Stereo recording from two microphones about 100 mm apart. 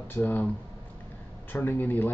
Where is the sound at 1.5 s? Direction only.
20° left (ahead or behind).